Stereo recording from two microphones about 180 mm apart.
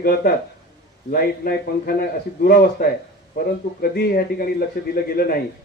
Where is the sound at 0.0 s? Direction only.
55° left (ahead or behind).